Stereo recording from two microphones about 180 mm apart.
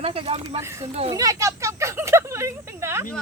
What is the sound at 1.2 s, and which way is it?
Speech, 15° right (ahead or behind).